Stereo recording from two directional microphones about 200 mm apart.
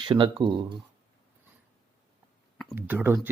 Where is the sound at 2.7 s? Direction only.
10° right (ahead or behind).